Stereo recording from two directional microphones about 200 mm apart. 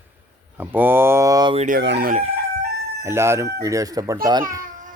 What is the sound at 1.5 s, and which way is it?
Chicken, 40° right (ahead or behind).